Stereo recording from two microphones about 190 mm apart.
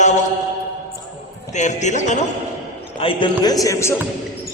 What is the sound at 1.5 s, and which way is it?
Speech, 40° left (ahead or behind).